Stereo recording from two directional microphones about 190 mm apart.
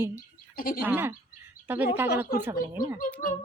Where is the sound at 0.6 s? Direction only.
50° left (ahead or behind).